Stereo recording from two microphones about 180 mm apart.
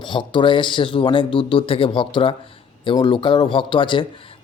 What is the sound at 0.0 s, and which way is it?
A man's voice, 25° left (ahead or behind).